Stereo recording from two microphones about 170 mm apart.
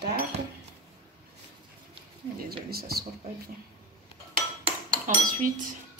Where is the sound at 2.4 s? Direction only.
65° right (ahead or behind).